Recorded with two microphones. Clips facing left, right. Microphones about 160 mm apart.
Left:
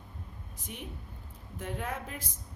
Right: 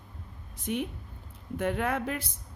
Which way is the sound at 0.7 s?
75° right (ahead or behind).